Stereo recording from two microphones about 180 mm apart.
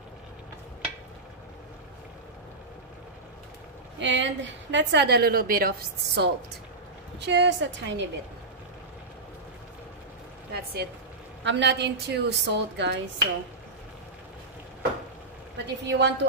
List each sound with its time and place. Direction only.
4.0 s a woman's voice: 90° right; by 6.3 s 60° right (ahead or behind)
7.2 s a woman's voice: 75° right (ahead or behind)
10.5 s a woman's voice: 65° right (ahead or behind)
11.4 s a woman's voice: 75° right (ahead or behind)
15.5 s a woman's voice: 80° right